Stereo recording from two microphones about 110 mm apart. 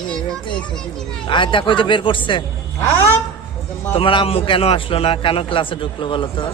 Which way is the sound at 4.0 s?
55° left (ahead or behind).